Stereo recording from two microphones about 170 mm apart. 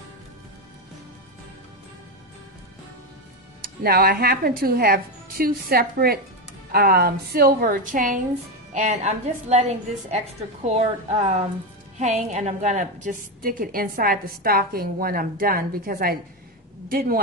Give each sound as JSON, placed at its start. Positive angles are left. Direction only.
{"t": 3.8, "sound": "a woman's voice", "side_deg": -65}